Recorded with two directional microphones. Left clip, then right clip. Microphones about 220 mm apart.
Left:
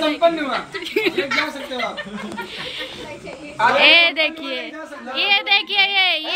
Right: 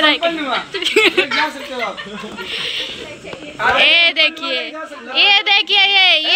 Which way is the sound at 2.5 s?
5° left (ahead or behind).